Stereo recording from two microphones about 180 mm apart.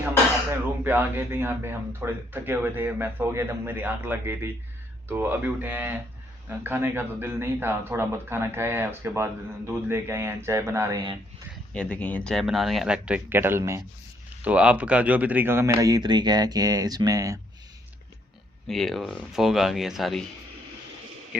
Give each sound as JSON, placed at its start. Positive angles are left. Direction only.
{"t": 0.9, "sound": "speech", "side_deg": -10}
{"t": 11.7, "sound": "speech", "side_deg": 5}
{"t": 18.7, "sound": "speech", "side_deg": 0}